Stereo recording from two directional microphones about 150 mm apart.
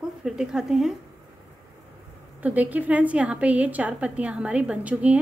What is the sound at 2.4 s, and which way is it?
A woman's voice, 10° right (ahead or behind).